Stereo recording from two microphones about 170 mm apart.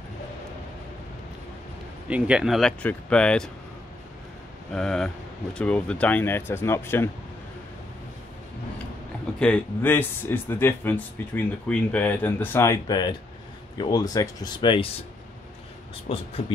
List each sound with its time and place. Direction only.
2.0 s speech: 5° right (ahead or behind)
4.7 s speech: 5° left (ahead or behind)
9.4 s speech: 10° left (ahead or behind); by 14.9 s 30° left (ahead or behind)
16.1 s speech: 35° left (ahead or behind)